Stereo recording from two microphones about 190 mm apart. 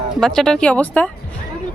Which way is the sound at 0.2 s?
5° left (ahead or behind).